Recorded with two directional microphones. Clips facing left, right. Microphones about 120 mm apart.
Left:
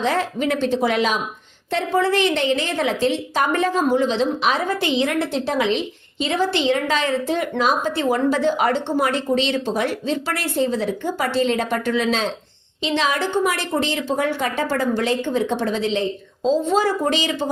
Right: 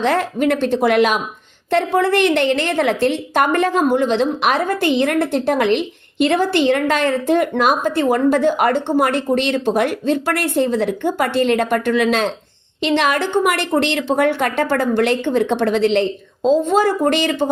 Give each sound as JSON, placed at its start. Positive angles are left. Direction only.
{"t": 0.0, "sound": "a woman's voice", "side_deg": -55}